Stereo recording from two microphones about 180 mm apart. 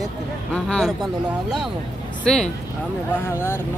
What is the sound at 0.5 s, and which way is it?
Speech, 5° left (ahead or behind).